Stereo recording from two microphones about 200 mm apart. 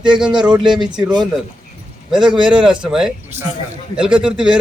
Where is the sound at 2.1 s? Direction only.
Centre (ahead or behind).